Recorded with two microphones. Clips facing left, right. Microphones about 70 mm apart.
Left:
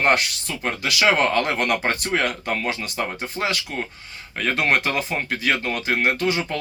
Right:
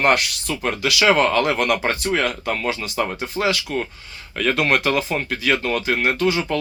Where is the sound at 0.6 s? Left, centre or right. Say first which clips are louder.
Right 2 dB; left.